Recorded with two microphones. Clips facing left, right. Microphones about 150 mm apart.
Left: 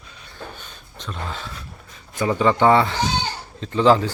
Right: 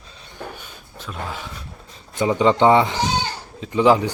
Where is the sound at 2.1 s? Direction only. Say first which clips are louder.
Right 2 dB; 20° right (ahead or behind).